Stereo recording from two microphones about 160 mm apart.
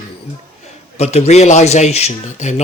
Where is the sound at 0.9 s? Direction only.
40° left (ahead or behind).